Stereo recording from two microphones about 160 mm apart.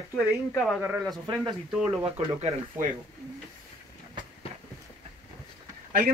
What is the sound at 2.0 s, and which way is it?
Speech, 40° right (ahead or behind).